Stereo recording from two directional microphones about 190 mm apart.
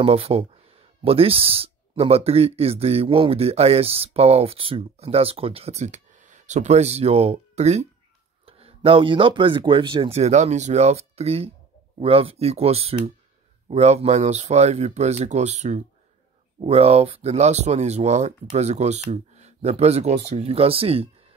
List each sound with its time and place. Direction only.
0.0 s speech: 30° right (ahead or behind)